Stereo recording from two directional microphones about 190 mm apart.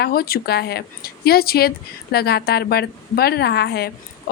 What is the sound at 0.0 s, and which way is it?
A woman's voice, 55° left (ahead or behind).